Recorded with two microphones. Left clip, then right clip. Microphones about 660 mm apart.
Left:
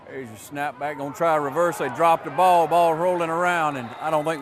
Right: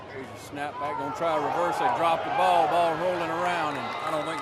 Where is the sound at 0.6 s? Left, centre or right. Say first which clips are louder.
Left 3 dB; left.